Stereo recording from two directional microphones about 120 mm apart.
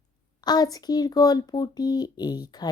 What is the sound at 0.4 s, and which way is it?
Speech, 35° left (ahead or behind).